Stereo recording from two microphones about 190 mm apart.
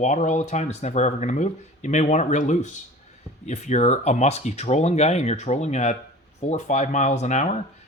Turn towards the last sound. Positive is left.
turn(degrees=40)  # may be behind; listen again after turning